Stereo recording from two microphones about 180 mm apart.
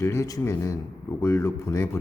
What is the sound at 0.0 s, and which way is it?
A man's voice, 15° left (ahead or behind).